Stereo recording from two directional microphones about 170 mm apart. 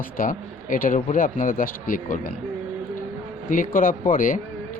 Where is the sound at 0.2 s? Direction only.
55° left (ahead or behind).